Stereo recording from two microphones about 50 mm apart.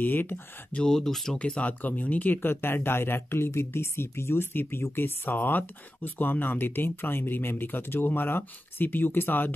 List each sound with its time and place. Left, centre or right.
0.0 s speech: left
0.8 s speech: centre
1.3 s speech: left
2.4 s speech: left